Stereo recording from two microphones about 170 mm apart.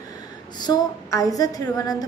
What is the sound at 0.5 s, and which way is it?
A woman's voice, 25° left (ahead or behind).